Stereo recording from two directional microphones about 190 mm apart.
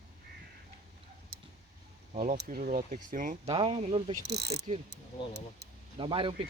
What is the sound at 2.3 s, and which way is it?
Speech, 50° right (ahead or behind).